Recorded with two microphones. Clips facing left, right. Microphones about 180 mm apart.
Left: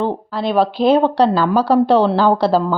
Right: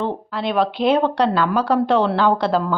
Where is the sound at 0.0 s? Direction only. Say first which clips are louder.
Left 3 dB; 35° left (ahead or behind).